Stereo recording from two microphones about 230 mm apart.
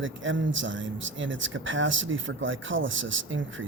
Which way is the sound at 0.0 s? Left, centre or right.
Right.